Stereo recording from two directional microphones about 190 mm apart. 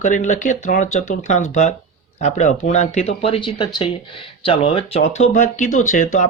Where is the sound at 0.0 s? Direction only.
40° left (ahead or behind).